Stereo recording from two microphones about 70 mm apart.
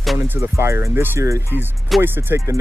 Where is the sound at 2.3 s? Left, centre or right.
Right.